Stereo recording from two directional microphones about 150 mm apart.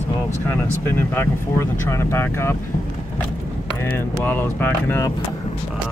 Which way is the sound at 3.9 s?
15° left (ahead or behind).